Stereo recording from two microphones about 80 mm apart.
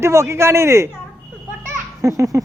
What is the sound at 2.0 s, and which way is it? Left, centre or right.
Baby laughter, right.